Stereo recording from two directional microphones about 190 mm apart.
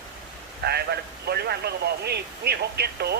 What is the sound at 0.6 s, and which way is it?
A man's voice, 55° right (ahead or behind).